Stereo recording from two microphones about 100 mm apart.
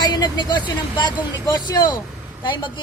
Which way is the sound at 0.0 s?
45° left (ahead or behind).